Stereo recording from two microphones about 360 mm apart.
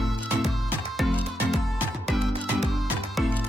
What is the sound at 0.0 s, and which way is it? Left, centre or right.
Music, centre.